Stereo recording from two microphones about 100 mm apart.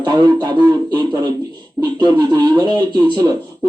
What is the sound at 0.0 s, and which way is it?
Speech, 45° right (ahead or behind).